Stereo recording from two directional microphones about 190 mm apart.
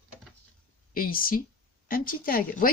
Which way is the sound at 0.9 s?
50° left (ahead or behind).